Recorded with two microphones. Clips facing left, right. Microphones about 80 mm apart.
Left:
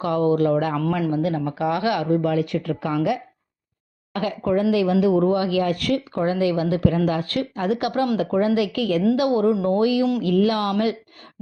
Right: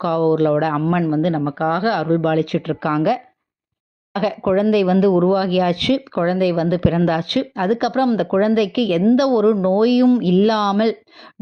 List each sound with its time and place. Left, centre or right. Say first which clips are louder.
0.0 s speech: right 3 dB; right
4.1 s speech: right 4 dB; right
4.7 s speech: right 4 dB; right
6.4 s speech: right 3 dB; right
6.7 s speech: right 3 dB; right
8.2 s speech: right 4 dB; right